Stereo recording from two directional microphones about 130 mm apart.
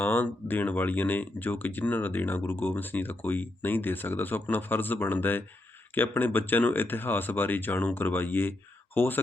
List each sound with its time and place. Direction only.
0.0 s speech: 15° left (ahead or behind)